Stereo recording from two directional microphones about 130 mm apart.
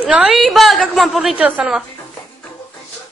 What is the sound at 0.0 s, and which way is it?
A woman's voice, 10° right (ahead or behind).